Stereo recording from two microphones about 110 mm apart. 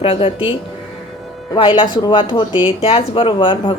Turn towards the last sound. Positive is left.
turn(degrees=45)  # may be behind; listen again after turning